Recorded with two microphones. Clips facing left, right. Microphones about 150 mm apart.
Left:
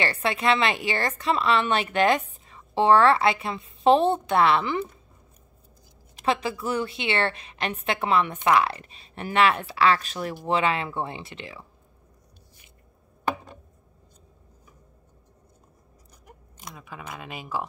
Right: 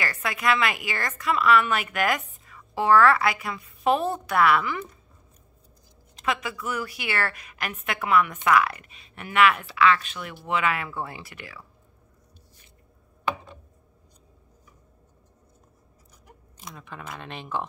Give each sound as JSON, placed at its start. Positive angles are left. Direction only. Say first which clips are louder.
{"t": 0.0, "sound": "a woman's voice", "louder": "left 3 dB", "side_deg": 30}
{"t": 6.2, "sound": "a woman's voice", "louder": "left 3 dB", "side_deg": 30}
{"t": 13.3, "sound": "a sound", "louder": "left 1 dB", "side_deg": 45}
{"t": 16.6, "sound": "speech", "louder": "even", "side_deg": 5}